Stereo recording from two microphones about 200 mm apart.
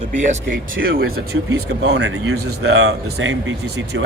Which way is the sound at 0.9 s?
50° right (ahead or behind).